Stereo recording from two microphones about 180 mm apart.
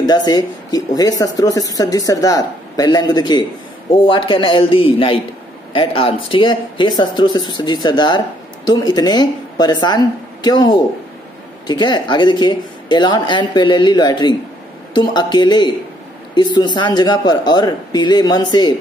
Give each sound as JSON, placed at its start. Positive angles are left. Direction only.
{"t": 0.0, "sound": "speech", "side_deg": 20}